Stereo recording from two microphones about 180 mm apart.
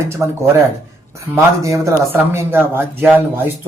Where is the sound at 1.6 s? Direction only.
15° right (ahead or behind).